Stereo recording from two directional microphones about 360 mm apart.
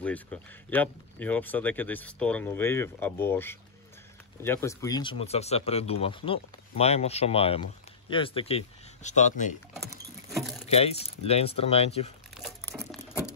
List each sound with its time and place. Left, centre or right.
0.0 s speech: centre
9.8 s patter: centre
10.7 s speech: centre
12.4 s crumpling: centre